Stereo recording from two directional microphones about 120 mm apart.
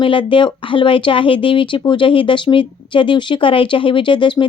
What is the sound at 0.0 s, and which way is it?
Speech, 45° left (ahead or behind).